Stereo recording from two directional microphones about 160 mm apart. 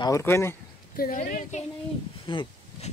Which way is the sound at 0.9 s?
65° left (ahead or behind).